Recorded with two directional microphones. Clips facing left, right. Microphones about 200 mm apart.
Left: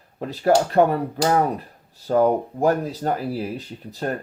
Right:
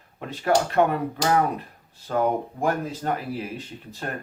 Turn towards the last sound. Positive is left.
turn(degrees=35)  # may be behind; listen again after turning